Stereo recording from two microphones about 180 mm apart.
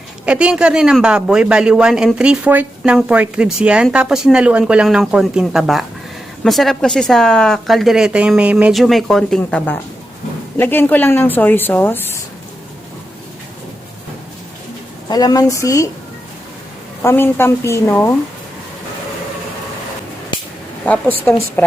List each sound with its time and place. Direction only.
0.3 s speech: 5° right (ahead or behind); by 12.2 s 10° left (ahead or behind)
15.1 s a woman's voice: 20° left (ahead or behind)
17.0 s speech: 15° left (ahead or behind)
20.8 s speech: 10° left (ahead or behind)